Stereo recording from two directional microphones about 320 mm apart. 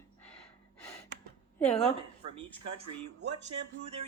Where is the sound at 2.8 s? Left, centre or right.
Right.